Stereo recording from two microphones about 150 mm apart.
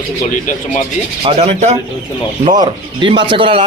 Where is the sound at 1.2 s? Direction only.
45° right (ahead or behind).